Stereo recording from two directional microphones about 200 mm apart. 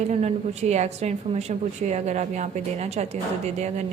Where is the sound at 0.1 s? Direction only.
30° right (ahead or behind).